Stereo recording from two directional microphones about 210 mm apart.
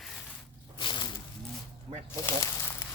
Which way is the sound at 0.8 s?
20° left (ahead or behind).